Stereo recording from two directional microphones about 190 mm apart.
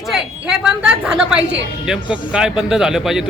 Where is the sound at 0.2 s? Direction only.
5° right (ahead or behind).